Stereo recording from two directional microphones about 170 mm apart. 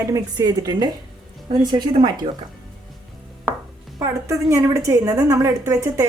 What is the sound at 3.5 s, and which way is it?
Chopping, 10° right (ahead or behind).